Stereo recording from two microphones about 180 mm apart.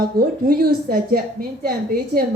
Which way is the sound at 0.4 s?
55° right (ahead or behind).